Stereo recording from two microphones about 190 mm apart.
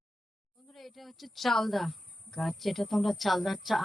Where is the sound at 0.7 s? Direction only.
Centre (ahead or behind).